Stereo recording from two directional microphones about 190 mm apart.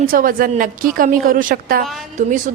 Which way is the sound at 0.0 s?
50° right (ahead or behind).